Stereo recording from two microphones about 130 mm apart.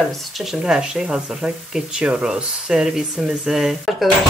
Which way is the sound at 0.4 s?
5° right (ahead or behind).